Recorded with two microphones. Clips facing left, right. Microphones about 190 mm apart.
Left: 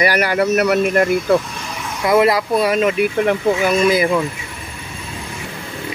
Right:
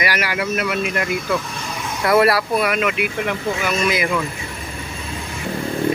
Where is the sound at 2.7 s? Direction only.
30° left (ahead or behind).